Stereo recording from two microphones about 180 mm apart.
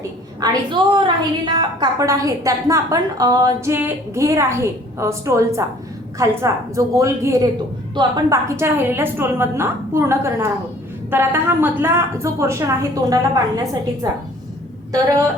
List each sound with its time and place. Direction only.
0.4 s a woman's voice: 25° right (ahead or behind)